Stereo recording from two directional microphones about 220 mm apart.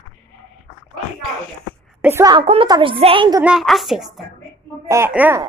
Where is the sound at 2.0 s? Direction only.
10° right (ahead or behind).